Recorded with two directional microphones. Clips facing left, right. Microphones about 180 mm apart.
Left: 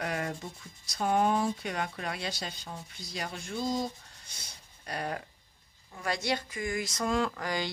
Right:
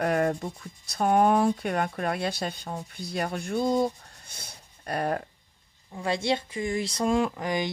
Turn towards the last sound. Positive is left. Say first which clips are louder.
# right 4 dB
turn(degrees=-20)  # may be behind; listen again after turning